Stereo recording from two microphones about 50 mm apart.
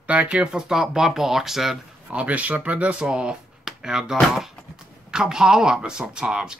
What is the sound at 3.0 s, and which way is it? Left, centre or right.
Speech, centre.